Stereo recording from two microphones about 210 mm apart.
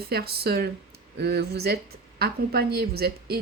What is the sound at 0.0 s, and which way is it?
Speech, 50° right (ahead or behind).